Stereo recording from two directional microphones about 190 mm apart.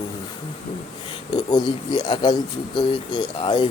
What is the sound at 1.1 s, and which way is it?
Speech, 25° left (ahead or behind).